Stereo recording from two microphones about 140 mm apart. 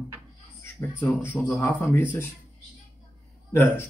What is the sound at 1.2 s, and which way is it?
Speech, 15° left (ahead or behind).